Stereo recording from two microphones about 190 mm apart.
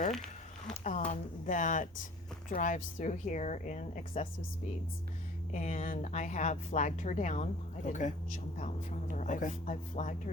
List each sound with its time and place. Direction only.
0.7 s a sound: 35° left (ahead or behind)
1.1 s speech: 40° left (ahead or behind)
5.5 s speech: 40° left (ahead or behind)